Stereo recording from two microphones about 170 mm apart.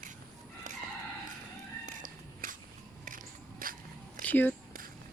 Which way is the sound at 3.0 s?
55° right (ahead or behind).